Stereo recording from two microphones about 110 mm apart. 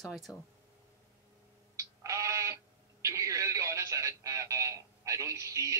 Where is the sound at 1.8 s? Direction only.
30° right (ahead or behind).